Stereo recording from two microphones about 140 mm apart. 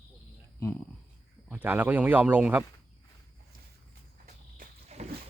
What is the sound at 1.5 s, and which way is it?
Speech, 10° right (ahead or behind).